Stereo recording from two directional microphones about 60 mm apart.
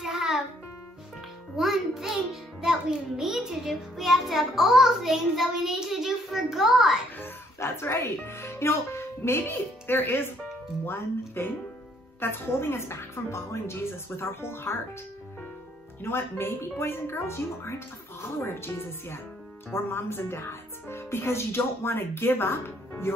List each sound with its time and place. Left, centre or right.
0.0 s music: centre
1.6 s a child's voice: centre
7.2 s speech: left
16.0 s speech: left